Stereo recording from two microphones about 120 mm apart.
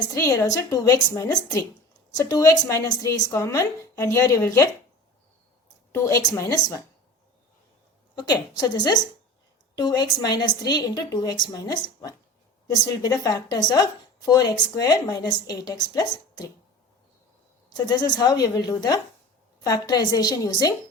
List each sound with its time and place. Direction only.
0.1 s a woman's voice: 25° left (ahead or behind)
5.9 s a woman's voice: 20° left (ahead or behind)
8.1 s a woman's voice: 40° left (ahead or behind)
17.7 s a woman's voice: 35° left (ahead or behind)